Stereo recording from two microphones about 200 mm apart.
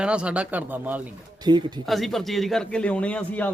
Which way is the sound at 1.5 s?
20° right (ahead or behind).